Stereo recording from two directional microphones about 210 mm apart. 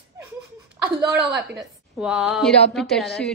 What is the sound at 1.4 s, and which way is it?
A woman's voice, 5° right (ahead or behind).